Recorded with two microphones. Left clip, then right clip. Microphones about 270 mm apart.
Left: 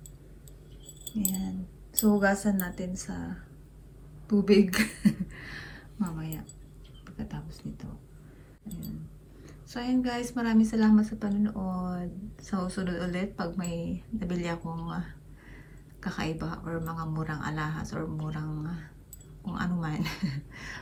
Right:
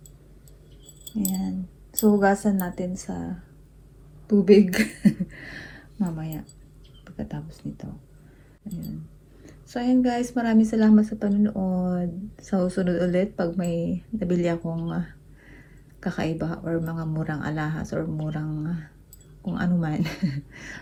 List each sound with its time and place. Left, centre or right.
2.1 s a woman's voice: centre
9.4 s a woman's voice: centre
11.6 s speech: right
12.4 s a woman's voice: centre